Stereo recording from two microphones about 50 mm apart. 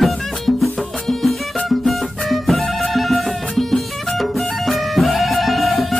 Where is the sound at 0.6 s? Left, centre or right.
Centre.